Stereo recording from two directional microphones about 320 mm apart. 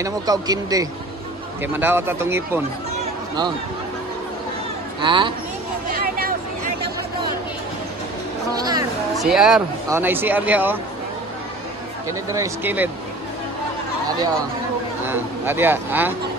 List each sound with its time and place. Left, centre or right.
0.0 s speech: centre
5.0 s speech: centre
5.9 s hubbub: right
8.5 s a sound: centre
9.1 s speech: centre
12.1 s speech: centre
15.0 s speech: centre